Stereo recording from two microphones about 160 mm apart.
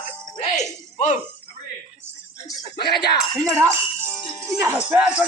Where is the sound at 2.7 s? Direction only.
90° left.